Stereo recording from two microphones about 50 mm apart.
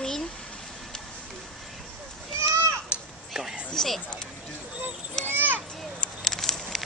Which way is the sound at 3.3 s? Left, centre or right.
Centre.